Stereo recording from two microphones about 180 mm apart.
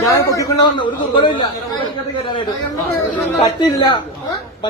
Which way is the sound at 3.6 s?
25° left (ahead or behind).